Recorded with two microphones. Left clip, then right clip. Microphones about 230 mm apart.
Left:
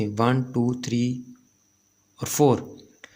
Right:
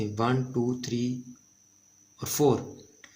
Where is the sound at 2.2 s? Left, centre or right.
Left.